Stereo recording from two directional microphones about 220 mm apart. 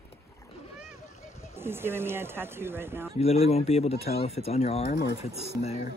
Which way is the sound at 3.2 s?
25° left (ahead or behind).